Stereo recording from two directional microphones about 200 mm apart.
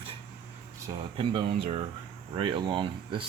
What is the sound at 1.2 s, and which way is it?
Speech, 25° right (ahead or behind).